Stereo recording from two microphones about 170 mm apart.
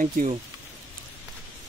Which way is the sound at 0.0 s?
50° right (ahead or behind).